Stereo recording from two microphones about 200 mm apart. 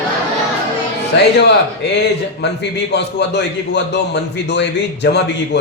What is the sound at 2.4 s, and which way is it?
Speech, 55° left (ahead or behind).